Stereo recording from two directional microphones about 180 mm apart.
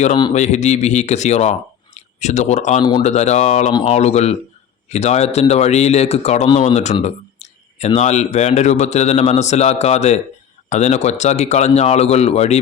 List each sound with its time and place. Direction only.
0.3 s speech: 40° left (ahead or behind)